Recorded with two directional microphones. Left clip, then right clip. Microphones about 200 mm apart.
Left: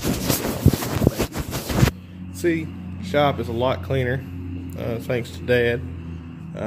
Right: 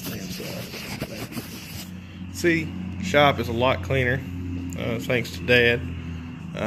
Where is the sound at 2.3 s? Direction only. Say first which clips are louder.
Even; 10° left (ahead or behind).